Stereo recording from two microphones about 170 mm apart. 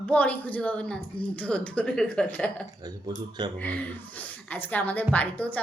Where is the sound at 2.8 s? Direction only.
25° right (ahead or behind).